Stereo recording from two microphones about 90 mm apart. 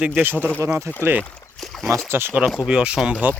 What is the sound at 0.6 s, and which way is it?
Speech, 30° right (ahead or behind).